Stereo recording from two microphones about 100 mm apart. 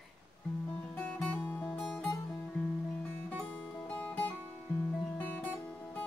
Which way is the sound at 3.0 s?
10° left (ahead or behind).